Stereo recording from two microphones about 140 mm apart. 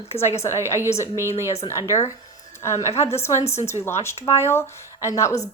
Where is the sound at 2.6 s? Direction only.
20° left (ahead or behind).